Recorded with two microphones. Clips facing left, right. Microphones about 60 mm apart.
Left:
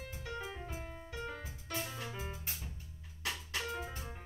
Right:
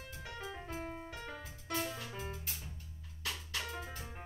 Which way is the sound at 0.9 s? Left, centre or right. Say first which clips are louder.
Left 1 dB; right.